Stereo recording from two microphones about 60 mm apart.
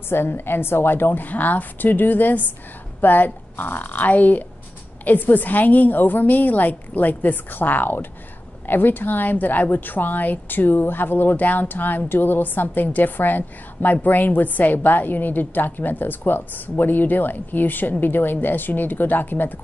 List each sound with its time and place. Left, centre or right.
0.1 s a woman's voice: left